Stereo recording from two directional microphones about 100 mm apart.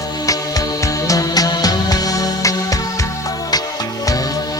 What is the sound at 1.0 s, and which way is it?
Music, 35° left (ahead or behind).